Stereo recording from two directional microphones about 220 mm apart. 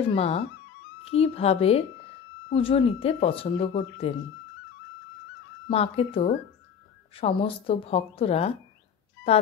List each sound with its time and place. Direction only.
0.0 s speech: 25° left (ahead or behind)
5.7 s speech: 25° left (ahead or behind)